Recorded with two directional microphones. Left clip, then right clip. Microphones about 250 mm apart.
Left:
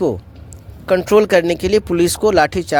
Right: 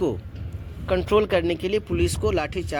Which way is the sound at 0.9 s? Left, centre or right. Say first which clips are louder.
Left 8 dB; left.